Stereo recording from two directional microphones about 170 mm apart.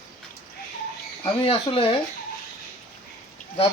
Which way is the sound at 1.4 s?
30° left (ahead or behind).